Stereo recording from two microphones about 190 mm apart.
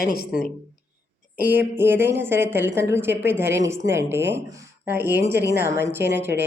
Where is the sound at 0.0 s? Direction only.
55° left (ahead or behind).